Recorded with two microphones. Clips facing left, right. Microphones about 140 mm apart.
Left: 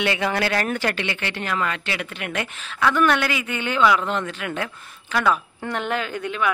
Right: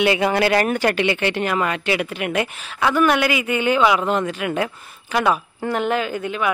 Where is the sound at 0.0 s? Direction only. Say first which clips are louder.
Right 5 dB; 15° right (ahead or behind).